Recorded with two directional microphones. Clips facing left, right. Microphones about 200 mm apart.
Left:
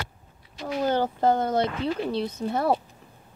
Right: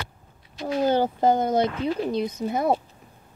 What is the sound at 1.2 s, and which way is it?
Speech, 15° right (ahead or behind).